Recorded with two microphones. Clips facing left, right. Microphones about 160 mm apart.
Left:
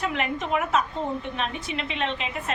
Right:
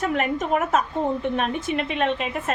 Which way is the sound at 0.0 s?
45° right (ahead or behind).